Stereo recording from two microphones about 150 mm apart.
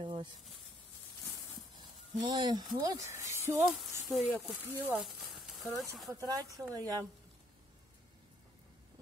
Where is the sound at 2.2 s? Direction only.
30° right (ahead or behind).